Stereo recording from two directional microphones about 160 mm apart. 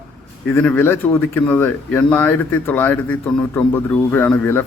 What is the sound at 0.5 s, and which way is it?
Speech, 15° left (ahead or behind).